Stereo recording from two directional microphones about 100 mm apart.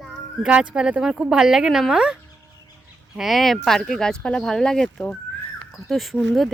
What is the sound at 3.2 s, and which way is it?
Speech, centre (ahead or behind).